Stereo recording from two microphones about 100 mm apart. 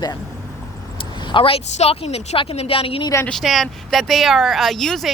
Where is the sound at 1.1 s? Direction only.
50° left (ahead or behind); by 3.0 s 70° left (ahead or behind).